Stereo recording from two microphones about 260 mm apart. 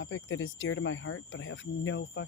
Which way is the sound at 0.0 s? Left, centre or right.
Left.